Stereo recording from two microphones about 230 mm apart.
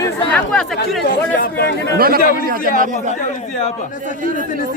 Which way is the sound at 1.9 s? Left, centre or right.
Right.